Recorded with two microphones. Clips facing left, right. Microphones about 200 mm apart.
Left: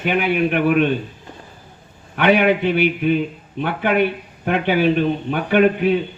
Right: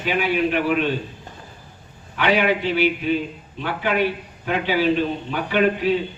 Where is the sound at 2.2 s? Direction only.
55° left (ahead or behind).